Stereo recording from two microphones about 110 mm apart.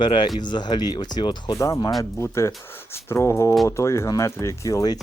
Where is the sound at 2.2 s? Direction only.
25° left (ahead or behind).